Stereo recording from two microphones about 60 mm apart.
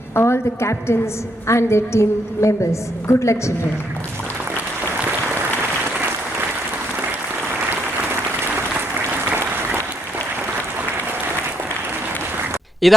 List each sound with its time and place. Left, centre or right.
0.1 s a woman's voice: left
12.8 s speech: centre